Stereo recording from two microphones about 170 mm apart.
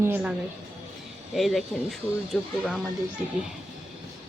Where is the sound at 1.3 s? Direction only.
Centre (ahead or behind).